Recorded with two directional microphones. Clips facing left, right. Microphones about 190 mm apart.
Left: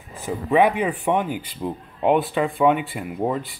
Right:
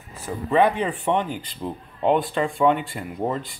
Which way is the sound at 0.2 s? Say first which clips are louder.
Left 1 dB; 10° left (ahead or behind).